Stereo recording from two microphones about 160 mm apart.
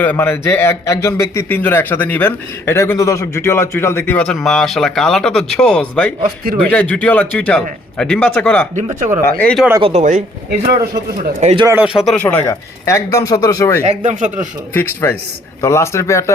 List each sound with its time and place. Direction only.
0.0 s a man's voice: 15° left (ahead or behind)
8.7 s speech: 50° right (ahead or behind)
9.2 s a man's voice: 10° left (ahead or behind)
9.8 s speech: 45° right (ahead or behind)
11.7 s speech: 10° right (ahead or behind)
12.0 s speech: 10° left (ahead or behind)
13.8 s speech: 50° right (ahead or behind)
14.7 s a man's voice: 15° left (ahead or behind)